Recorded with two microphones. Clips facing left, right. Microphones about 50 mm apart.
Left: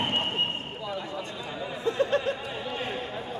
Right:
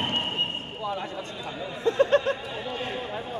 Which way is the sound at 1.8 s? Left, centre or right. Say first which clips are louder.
Right 5 dB; right.